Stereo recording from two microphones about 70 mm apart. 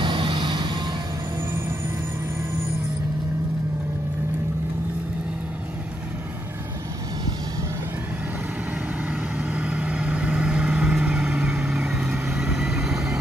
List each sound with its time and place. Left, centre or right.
9.0 s vehicle: centre